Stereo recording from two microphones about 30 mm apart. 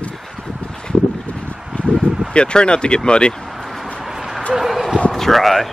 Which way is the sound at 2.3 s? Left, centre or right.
Left.